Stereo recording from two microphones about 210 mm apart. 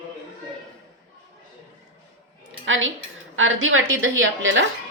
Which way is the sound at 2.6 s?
65° right (ahead or behind).